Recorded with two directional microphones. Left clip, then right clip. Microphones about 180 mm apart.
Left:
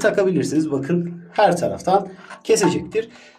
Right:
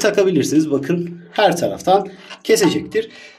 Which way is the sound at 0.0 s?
10° right (ahead or behind).